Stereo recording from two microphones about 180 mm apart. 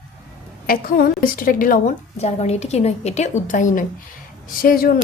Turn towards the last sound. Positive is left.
turn(degrees=55)  # may be behind; listen again after turning